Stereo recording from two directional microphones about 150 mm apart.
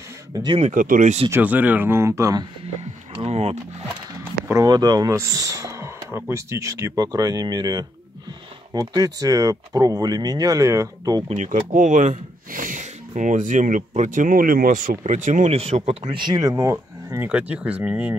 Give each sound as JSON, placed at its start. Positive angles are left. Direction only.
{"t": 0.3, "sound": "speech", "side_deg": -30}
{"t": 0.6, "sound": "speech", "side_deg": -55}
{"t": 1.3, "sound": "speech", "side_deg": -10}
{"t": 2.8, "sound": "a sound", "side_deg": -45}
{"t": 4.2, "sound": "a sound", "side_deg": -15}
{"t": 4.6, "sound": "speech", "side_deg": -25}
{"t": 11.2, "sound": "speech", "side_deg": -55}